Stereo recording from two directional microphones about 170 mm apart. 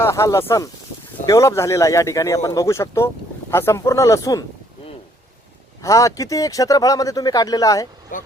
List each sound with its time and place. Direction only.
0.0 s speech: 15° left (ahead or behind)
5.8 s speech: 20° left (ahead or behind)
8.1 s speech: 50° left (ahead or behind)